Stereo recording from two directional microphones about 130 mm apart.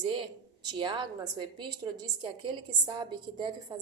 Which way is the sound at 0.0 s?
35° right (ahead or behind).